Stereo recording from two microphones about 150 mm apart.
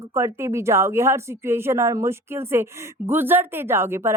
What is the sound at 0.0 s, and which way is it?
A woman's voice, 15° right (ahead or behind).